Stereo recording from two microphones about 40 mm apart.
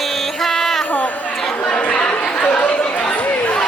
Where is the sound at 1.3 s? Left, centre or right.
Centre.